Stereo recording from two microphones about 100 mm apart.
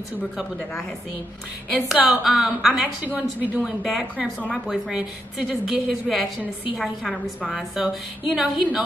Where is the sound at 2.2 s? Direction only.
5° right (ahead or behind).